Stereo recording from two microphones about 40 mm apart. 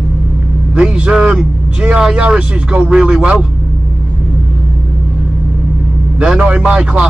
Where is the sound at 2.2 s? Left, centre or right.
Right.